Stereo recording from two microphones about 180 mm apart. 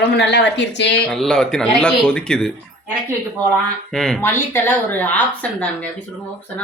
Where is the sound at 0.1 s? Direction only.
70° left (ahead or behind).